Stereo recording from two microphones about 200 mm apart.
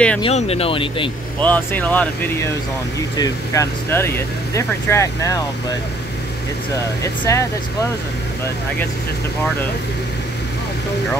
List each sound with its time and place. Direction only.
0.2 s speech: 30° left (ahead or behind)
1.4 s speech: 10° left (ahead or behind)
7.0 s speech: 15° left (ahead or behind)